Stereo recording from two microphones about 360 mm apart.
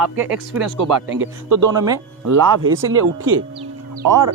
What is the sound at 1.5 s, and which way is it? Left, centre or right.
Speech, right.